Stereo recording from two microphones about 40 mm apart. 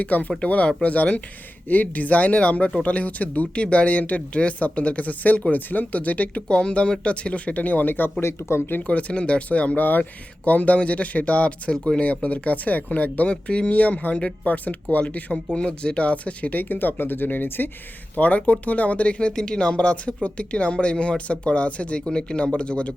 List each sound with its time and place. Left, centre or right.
0.0 s speech: left
1.7 s speech: left
6.5 s speech: left
8.2 s speech: left
8.9 s speech: left
11.7 s speech: left
12.2 s speech: left
13.3 s speech: left
15.5 s speech: left
18.2 s speech: left
19.4 s speech: left